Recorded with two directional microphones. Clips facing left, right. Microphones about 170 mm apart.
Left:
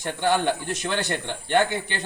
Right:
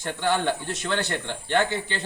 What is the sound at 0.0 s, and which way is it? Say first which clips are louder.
Speech: left 2 dB; 15° left (ahead or behind).